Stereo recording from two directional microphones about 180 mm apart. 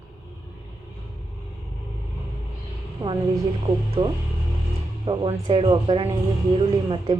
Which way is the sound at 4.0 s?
30° right (ahead or behind).